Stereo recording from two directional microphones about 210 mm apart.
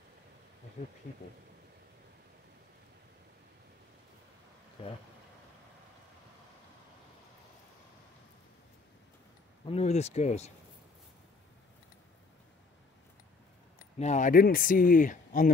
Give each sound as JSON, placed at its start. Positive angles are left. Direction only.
{"t": 9.7, "sound": "speech", "side_deg": 30}
{"t": 13.9, "sound": "speech", "side_deg": 35}